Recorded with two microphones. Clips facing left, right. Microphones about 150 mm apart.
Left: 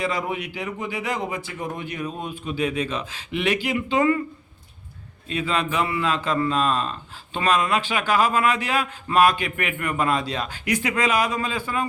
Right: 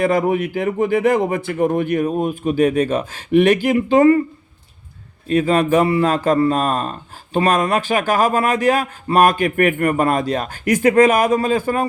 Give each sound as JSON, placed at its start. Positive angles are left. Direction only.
{"t": 0.0, "sound": "speech", "side_deg": -50}
{"t": 5.3, "sound": "speech", "side_deg": -45}